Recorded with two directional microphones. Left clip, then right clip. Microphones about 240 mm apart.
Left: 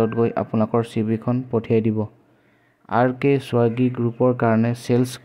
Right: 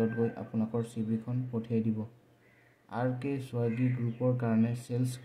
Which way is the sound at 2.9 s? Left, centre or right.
Left.